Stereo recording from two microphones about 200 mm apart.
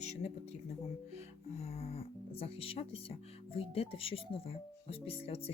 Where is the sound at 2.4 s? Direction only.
30° left (ahead or behind).